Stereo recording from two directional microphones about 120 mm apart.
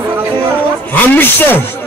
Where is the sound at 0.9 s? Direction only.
15° left (ahead or behind).